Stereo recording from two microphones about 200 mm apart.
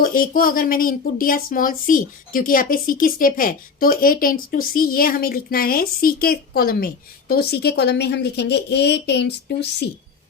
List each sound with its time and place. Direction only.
0.0 s speech: 45° left (ahead or behind)